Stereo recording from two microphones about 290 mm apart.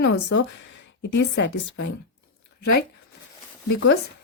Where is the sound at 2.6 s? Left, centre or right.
Left.